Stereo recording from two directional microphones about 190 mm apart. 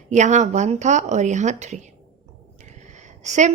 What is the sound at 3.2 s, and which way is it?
Speech, 40° right (ahead or behind).